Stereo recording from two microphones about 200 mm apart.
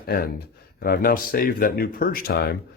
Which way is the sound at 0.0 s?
50° left (ahead or behind).